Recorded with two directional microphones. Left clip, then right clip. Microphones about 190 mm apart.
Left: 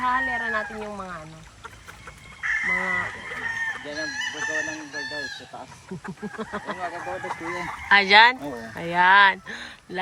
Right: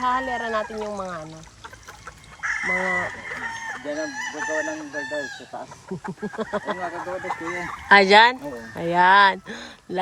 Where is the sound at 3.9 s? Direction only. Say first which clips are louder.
Even; 50° right (ahead or behind).